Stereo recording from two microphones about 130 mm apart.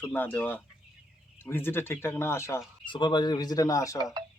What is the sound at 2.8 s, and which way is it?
Speech, 40° left (ahead or behind).